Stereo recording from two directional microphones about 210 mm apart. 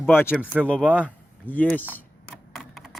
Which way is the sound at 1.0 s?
5° left (ahead or behind).